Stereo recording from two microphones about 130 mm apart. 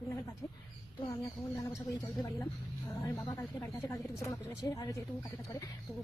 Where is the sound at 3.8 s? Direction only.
20° left (ahead or behind).